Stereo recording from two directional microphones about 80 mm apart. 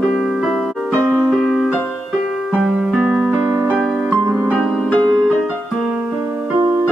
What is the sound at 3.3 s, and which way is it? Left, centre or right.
Music, right.